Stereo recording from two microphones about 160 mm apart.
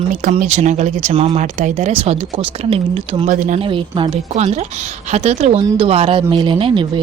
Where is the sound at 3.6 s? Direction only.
35° right (ahead or behind).